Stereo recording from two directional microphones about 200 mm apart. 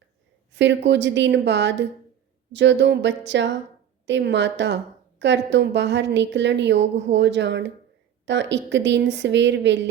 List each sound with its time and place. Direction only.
0.5 s a woman's voice: 60° right (ahead or behind)